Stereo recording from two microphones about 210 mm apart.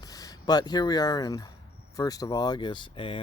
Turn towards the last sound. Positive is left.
turn(degrees=25)  # may be behind; listen again after turning